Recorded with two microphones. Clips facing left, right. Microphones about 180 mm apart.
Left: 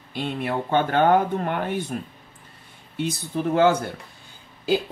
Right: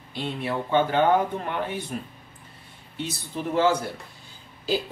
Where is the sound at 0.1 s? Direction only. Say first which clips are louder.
Left 2 dB; 55° left (ahead or behind).